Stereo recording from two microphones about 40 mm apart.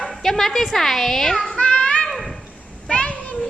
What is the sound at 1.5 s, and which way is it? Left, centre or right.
Child singing, left.